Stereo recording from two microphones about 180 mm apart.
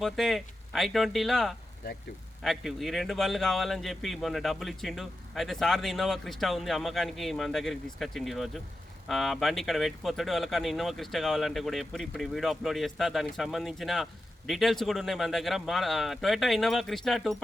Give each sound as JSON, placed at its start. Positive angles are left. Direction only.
{"t": 0.0, "sound": "speech", "side_deg": 0}